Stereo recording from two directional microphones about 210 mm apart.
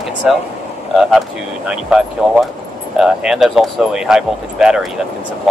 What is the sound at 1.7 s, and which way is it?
Speech, 5° right (ahead or behind).